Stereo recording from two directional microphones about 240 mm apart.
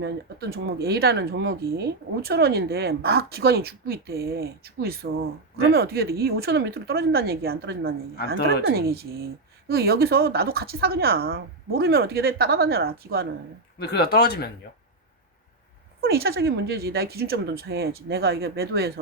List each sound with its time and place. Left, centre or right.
0.0 s speech: right
13.7 s speech: left
16.0 s speech: right